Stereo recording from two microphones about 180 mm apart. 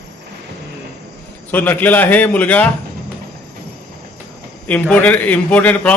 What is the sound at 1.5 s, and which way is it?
A man's voice, 10° left (ahead or behind).